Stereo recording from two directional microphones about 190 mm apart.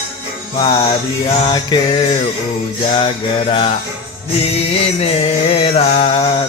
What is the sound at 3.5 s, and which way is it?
Music, 30° left (ahead or behind).